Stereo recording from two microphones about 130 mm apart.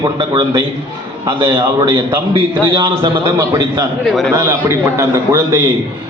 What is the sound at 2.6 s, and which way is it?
A man's voice, 30° right (ahead or behind).